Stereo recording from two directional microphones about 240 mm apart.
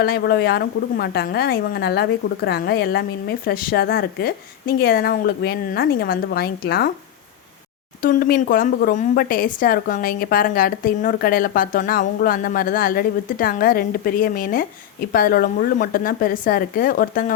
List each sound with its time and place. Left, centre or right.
0.0 s a woman's voice: left
8.0 s a woman's voice: left